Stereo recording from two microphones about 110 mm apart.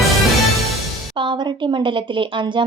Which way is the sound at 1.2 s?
45° right (ahead or behind).